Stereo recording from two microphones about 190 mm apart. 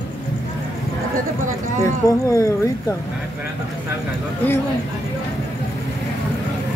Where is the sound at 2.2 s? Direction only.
15° left (ahead or behind).